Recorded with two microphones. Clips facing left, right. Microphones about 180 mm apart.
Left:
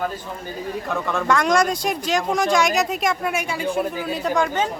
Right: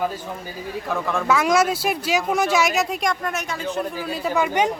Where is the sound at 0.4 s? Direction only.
5° right (ahead or behind).